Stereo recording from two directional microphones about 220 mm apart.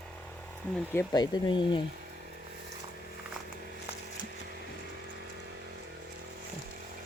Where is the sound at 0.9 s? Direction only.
15° left (ahead or behind).